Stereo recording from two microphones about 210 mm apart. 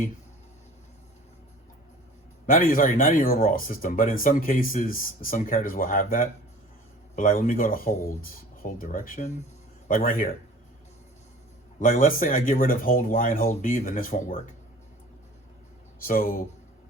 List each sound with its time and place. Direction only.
2.5 s speech: 40° left (ahead or behind)
11.8 s speech: 40° left (ahead or behind)
16.0 s speech: 45° left (ahead or behind)